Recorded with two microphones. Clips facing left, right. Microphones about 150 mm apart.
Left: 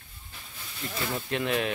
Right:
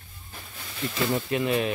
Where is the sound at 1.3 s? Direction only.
Centre (ahead or behind).